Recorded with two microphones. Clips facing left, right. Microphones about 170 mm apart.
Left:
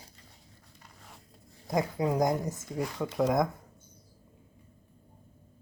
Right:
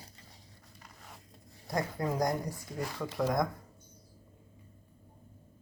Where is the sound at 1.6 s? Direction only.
20° left (ahead or behind).